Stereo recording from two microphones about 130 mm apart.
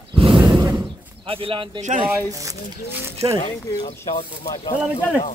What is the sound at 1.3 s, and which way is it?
Speech, 45° right (ahead or behind).